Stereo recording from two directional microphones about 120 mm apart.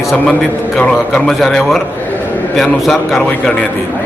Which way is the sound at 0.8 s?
5° left (ahead or behind).